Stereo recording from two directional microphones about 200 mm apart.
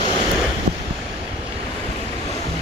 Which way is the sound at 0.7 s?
45° right (ahead or behind).